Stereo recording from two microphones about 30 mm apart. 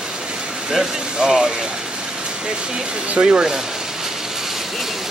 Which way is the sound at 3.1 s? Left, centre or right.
Right.